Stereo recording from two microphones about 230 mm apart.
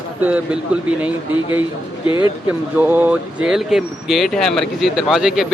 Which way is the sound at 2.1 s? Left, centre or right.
Left.